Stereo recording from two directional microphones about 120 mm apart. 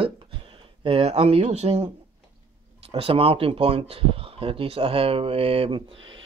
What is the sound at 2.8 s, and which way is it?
Speech, 55° right (ahead or behind).